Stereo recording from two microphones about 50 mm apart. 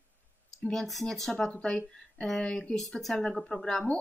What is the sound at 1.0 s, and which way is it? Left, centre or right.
A woman's voice, centre.